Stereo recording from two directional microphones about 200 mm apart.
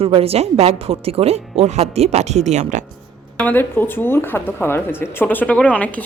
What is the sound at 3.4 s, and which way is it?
Speech, 10° left (ahead or behind).